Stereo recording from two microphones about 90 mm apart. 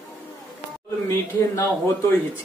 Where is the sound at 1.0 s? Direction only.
30° left (ahead or behind).